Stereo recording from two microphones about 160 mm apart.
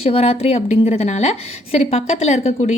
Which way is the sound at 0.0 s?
40° left (ahead or behind).